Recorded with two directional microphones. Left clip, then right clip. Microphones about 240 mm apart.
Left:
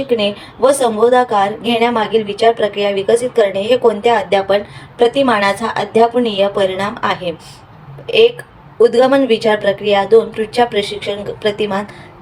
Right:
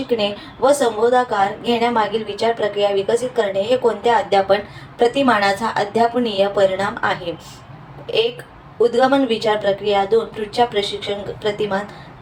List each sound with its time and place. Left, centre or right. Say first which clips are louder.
0.1 s a woman's voice: left 3 dB; left
8.8 s a woman's voice: left 5 dB; left